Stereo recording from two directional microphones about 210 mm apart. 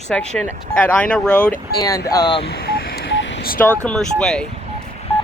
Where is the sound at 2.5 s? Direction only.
50° left (ahead or behind).